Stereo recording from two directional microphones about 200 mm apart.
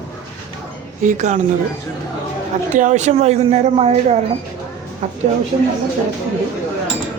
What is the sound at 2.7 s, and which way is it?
A woman's voice, 40° right (ahead or behind).